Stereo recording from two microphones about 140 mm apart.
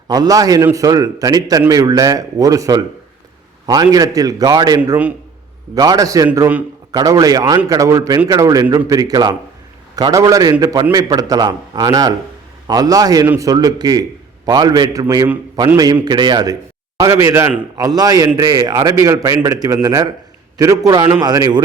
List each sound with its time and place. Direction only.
0.1 s a man's voice: 25° right (ahead or behind)